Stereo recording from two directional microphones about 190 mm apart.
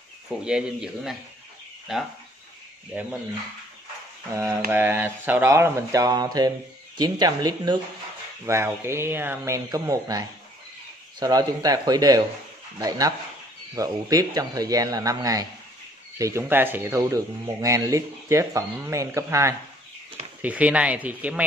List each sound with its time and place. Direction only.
0.3 s speech: 5° right (ahead or behind)
4.3 s speech: 15° right (ahead or behind)